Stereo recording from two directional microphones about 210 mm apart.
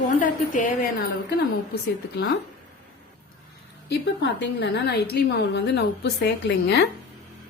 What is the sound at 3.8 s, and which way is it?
A woman's voice, 55° left (ahead or behind).